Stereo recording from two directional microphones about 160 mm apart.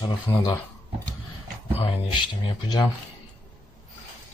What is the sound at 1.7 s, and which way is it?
Speech, 35° left (ahead or behind).